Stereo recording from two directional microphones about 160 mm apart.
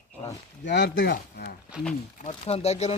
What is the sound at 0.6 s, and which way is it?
Speech, 90° left.